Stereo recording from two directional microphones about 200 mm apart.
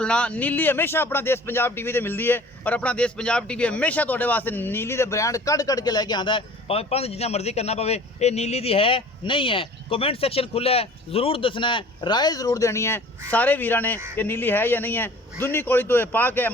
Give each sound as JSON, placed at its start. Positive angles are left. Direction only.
{"t": 0.0, "sound": "a man's voice", "side_deg": 5}